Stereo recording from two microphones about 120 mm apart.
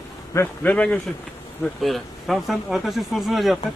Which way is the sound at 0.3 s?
15° left (ahead or behind).